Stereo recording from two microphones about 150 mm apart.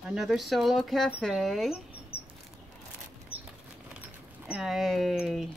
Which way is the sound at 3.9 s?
10° right (ahead or behind).